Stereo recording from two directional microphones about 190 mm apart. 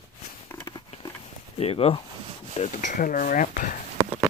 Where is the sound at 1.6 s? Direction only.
30° left (ahead or behind).